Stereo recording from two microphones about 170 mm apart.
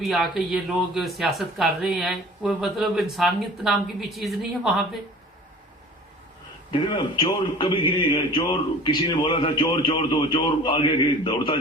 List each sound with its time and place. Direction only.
0.0 s speech: centre (ahead or behind)
6.7 s a man's voice: 30° left (ahead or behind)